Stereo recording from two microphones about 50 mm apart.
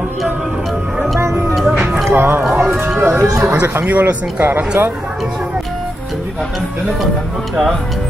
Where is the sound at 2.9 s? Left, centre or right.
Right.